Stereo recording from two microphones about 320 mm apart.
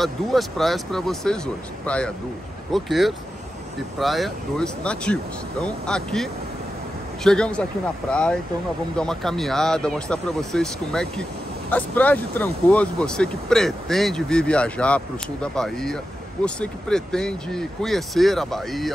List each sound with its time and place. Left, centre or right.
0.0 s speech: centre